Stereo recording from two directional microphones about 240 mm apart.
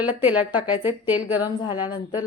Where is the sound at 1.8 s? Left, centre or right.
Centre.